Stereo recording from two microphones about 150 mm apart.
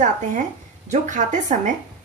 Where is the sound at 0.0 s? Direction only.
55° right (ahead or behind).